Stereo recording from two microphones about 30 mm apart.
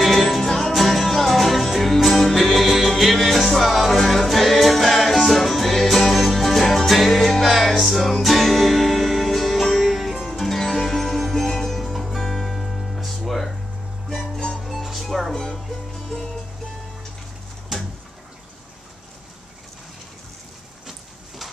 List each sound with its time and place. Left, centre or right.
0.0 s music: centre
0.5 s music: centre
7.4 s music: centre
10.4 s music: centre
15.3 s music: centre
17.7 s bird: centre